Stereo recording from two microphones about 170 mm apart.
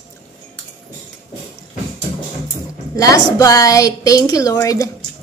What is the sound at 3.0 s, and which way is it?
A woman's voice, 20° left (ahead or behind).